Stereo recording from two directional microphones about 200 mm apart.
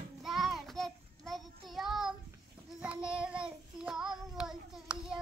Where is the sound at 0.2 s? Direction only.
Centre (ahead or behind).